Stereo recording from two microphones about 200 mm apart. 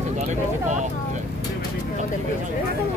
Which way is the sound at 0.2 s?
35° right (ahead or behind).